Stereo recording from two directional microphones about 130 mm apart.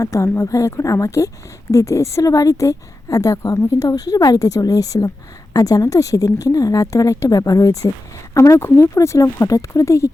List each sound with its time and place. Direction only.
0.0 s a woman's voice: 25° left (ahead or behind)